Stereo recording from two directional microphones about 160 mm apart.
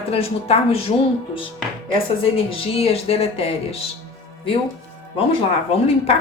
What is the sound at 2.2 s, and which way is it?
Speech, 35° left (ahead or behind).